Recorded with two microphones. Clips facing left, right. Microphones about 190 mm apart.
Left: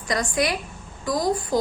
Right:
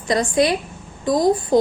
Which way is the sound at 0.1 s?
25° right (ahead or behind).